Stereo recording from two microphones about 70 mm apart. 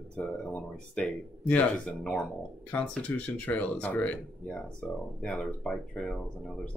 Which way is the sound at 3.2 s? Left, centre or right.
Left.